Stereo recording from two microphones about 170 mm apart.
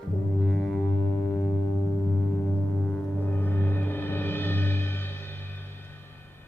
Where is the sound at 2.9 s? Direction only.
10° left (ahead or behind).